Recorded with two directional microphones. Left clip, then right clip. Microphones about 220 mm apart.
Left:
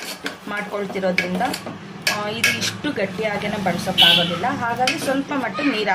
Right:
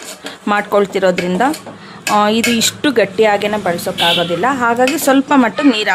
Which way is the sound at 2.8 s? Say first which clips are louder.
Right 11 dB; 50° right (ahead or behind).